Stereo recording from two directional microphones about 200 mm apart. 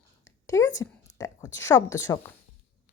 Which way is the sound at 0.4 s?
15° left (ahead or behind).